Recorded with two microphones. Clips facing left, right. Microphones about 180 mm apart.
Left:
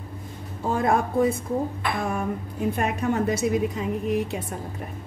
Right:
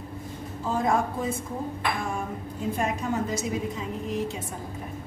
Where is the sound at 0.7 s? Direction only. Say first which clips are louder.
Left 2 dB; 65° left (ahead or behind).